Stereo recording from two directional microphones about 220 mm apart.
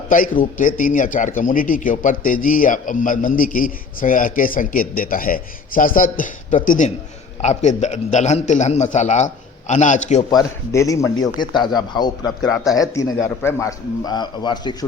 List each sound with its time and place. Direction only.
0.1 s a man's voice: 40° left (ahead or behind)
10.2 s a man's voice: 15° left (ahead or behind)